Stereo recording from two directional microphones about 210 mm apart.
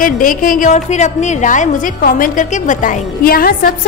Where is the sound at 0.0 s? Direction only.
40° left (ahead or behind).